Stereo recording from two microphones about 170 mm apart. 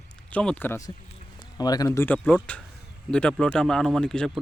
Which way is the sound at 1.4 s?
20° left (ahead or behind).